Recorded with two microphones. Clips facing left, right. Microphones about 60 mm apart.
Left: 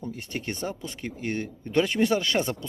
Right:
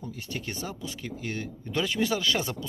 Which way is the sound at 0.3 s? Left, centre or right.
Left.